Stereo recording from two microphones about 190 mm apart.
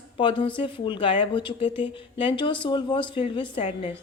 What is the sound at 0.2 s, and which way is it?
Speech, 25° left (ahead or behind).